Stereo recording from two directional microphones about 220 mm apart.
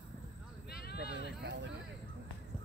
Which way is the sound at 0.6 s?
45° left (ahead or behind).